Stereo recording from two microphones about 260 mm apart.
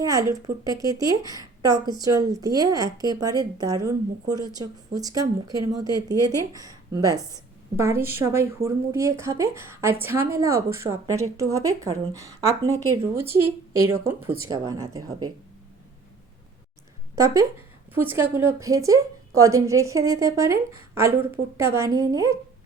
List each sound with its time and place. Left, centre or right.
0.0 s a woman's voice: centre
17.2 s a woman's voice: centre